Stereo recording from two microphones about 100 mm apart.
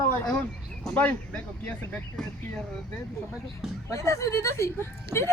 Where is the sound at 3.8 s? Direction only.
30° left (ahead or behind).